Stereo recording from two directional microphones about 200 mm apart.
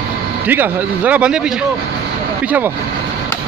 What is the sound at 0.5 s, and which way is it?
Speech, 10° right (ahead or behind).